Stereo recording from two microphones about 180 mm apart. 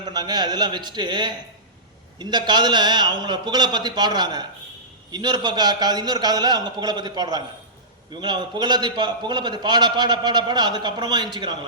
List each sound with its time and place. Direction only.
0.0 s a man's voice: 25° right (ahead or behind)